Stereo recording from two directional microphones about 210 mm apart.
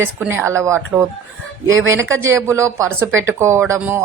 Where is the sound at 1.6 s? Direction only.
65° right (ahead or behind).